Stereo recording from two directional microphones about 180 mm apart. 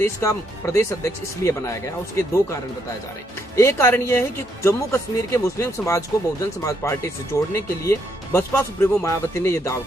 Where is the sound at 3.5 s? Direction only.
15° left (ahead or behind).